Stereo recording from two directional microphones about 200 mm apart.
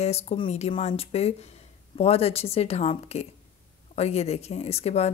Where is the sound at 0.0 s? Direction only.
30° left (ahead or behind).